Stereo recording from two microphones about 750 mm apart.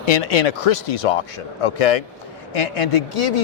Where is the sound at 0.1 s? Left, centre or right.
Left.